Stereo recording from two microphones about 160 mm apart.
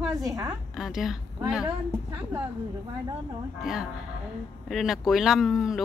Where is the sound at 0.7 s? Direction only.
5° right (ahead or behind).